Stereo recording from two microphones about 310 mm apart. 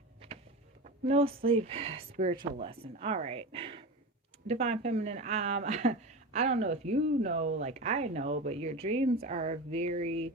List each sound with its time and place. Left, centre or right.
0.9 s speech: centre